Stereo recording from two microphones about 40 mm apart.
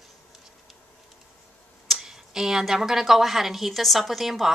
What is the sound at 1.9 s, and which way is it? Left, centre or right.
A woman's voice, centre.